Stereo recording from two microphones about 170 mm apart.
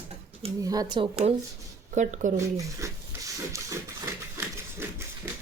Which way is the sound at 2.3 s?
20° right (ahead or behind).